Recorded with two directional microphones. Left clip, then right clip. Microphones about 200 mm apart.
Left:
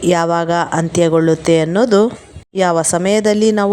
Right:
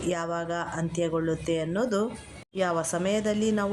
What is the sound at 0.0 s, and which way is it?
A woman's voice, 40° left (ahead or behind).